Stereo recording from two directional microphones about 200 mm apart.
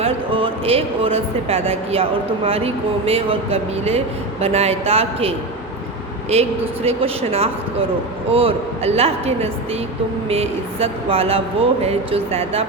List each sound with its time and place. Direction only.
0.0 s speech: 25° right (ahead or behind)
6.3 s speech: 30° right (ahead or behind)